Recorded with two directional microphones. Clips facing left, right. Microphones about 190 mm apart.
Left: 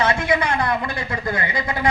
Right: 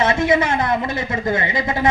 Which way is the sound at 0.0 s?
25° right (ahead or behind).